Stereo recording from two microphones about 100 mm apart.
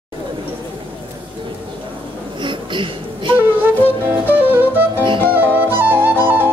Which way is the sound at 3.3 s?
20° right (ahead or behind).